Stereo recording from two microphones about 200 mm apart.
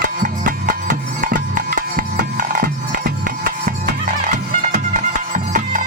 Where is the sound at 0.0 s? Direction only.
45° right (ahead or behind).